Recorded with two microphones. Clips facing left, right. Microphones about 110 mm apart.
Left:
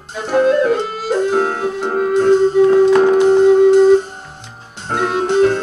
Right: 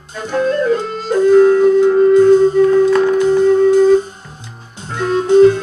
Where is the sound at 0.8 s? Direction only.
10° left (ahead or behind).